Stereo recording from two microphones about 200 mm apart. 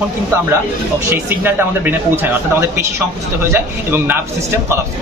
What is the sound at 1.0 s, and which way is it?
Speech, 10° right (ahead or behind).